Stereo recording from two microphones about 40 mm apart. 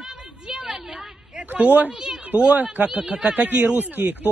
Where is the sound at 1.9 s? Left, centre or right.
Centre.